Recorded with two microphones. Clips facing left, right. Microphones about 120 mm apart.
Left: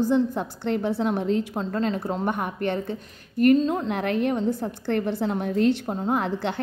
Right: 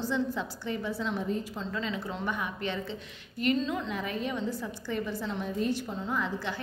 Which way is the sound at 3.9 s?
65° left (ahead or behind).